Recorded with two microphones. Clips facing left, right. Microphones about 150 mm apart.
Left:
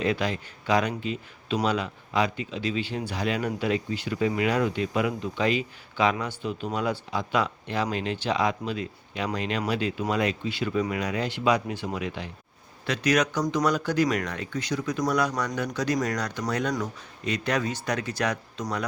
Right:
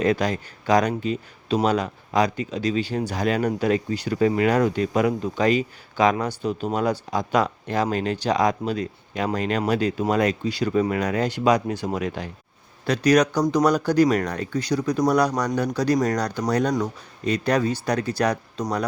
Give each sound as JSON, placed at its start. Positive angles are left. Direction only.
{"t": 0.0, "sound": "speech", "side_deg": -45}